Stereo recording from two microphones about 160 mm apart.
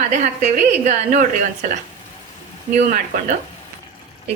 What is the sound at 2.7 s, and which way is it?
Speech, 50° right (ahead or behind).